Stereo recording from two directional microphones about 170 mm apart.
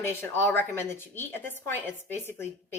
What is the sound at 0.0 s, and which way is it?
A woman's voice, 15° left (ahead or behind).